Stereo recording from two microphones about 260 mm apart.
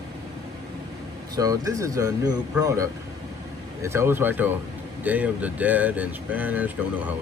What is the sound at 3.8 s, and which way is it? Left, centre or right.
Speech, centre.